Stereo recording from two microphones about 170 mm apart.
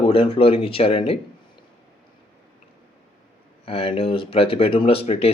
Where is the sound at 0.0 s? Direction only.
35° left (ahead or behind).